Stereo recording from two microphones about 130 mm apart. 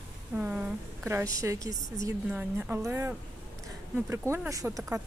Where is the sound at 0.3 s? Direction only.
10° right (ahead or behind).